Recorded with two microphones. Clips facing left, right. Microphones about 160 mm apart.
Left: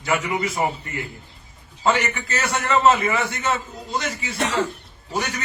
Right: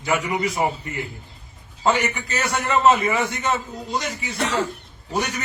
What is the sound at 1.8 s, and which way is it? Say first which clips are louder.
A man's voice: even; 15° right (ahead or behind).